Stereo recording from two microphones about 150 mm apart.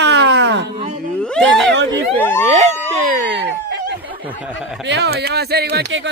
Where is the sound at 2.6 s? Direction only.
65° right (ahead or behind).